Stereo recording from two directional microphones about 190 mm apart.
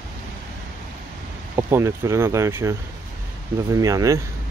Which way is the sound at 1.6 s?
15° right (ahead or behind).